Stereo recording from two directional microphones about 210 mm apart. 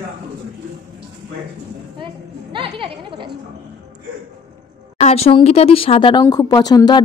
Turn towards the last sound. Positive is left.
turn(degrees=20)  # may be behind; listen again after turning